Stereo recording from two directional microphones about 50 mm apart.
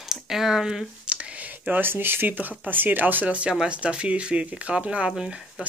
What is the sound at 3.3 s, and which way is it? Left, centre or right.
Speech, right.